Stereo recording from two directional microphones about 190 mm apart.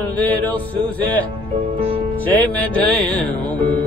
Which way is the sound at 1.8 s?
30° right (ahead or behind).